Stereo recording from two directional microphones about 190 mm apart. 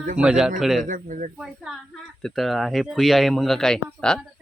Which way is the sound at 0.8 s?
45° right (ahead or behind).